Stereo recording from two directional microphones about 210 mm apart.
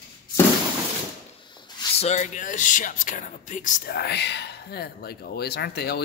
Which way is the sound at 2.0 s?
35° left (ahead or behind).